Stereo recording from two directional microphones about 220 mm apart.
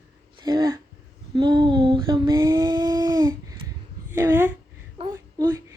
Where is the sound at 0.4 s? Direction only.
20° right (ahead or behind).